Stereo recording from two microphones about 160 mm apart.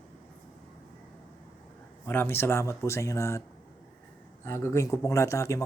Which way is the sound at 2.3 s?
15° left (ahead or behind).